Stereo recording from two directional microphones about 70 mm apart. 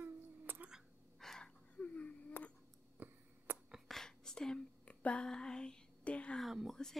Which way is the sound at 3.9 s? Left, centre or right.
Centre.